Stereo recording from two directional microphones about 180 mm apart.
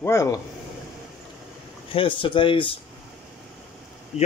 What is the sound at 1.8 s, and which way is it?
Speech, 30° left (ahead or behind).